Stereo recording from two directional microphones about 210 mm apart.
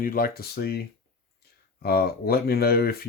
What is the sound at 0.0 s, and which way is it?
Speech, 45° left (ahead or behind).